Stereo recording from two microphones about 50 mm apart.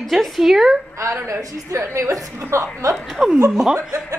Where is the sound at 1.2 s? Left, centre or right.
Right.